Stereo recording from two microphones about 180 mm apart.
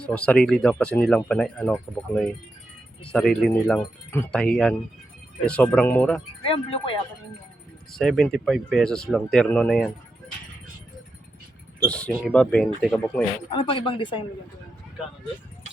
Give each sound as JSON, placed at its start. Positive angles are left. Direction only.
{"t": 0.0, "sound": "speech", "side_deg": 5}
{"t": 6.4, "sound": "speech", "side_deg": 30}
{"t": 7.9, "sound": "speech", "side_deg": 0}
{"t": 11.8, "sound": "speech", "side_deg": 5}
{"t": 13.5, "sound": "speech", "side_deg": 30}